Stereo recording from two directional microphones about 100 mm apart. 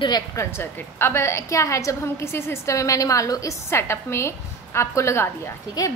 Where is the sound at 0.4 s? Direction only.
25° left (ahead or behind).